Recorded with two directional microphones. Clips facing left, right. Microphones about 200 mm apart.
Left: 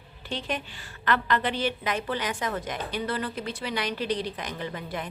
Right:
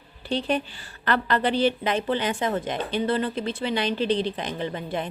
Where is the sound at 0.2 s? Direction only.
35° right (ahead or behind).